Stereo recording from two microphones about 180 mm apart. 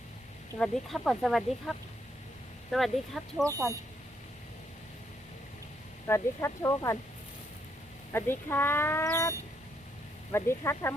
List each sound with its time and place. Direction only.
0.6 s speech: centre (ahead or behind)
2.7 s speech: centre (ahead or behind)
3.4 s speech: 15° right (ahead or behind)
6.1 s speech: 15° left (ahead or behind)
8.1 s speech: 10° left (ahead or behind)
10.3 s speech: 15° left (ahead or behind)